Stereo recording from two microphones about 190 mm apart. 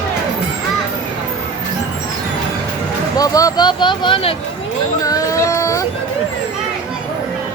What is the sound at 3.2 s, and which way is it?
Speech, 20° left (ahead or behind).